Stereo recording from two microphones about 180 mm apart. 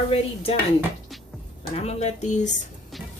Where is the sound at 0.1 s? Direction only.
30° left (ahead or behind).